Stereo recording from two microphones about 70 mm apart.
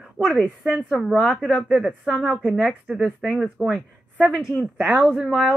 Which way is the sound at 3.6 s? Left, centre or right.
Centre.